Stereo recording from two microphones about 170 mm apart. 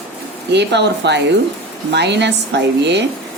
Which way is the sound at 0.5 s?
90° right.